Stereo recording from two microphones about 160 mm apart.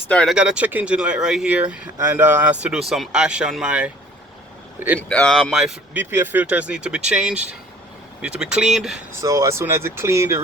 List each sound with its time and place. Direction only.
0.1 s speech: 5° left (ahead or behind)
0.3 s speech: 5° right (ahead or behind)
4.9 s speech: 5° left (ahead or behind)
9.2 s speech: 20° right (ahead or behind)